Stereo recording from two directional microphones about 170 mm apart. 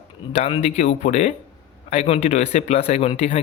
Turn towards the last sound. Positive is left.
turn(degrees=35)  # may be behind; listen again after turning